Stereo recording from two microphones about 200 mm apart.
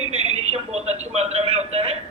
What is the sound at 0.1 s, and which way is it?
A man's voice, 30° right (ahead or behind).